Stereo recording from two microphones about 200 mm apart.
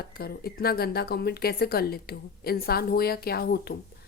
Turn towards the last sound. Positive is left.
turn(degrees=50)  # may be behind; listen again after turning